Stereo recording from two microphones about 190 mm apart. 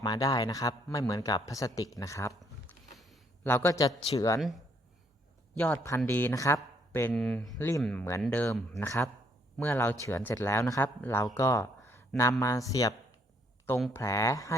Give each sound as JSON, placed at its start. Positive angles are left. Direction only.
{"t": 0.0, "sound": "speech", "side_deg": 20}
{"t": 3.4, "sound": "speech", "side_deg": 10}
{"t": 4.4, "sound": "speech", "side_deg": 0}
{"t": 13.9, "sound": "speech", "side_deg": 15}